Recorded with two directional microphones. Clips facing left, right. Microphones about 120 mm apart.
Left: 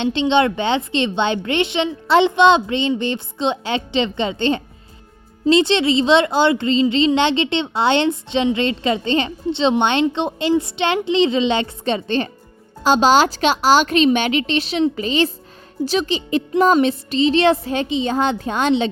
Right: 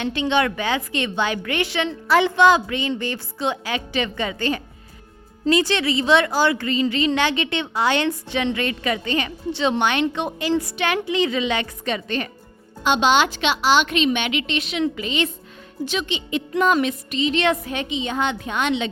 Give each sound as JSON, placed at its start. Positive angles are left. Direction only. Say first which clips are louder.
{"t": 0.0, "sound": "a woman's voice", "louder": "left 4 dB", "side_deg": 25}